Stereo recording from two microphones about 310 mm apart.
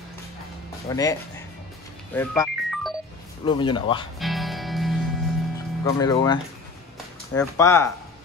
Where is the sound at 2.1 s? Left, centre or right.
Centre.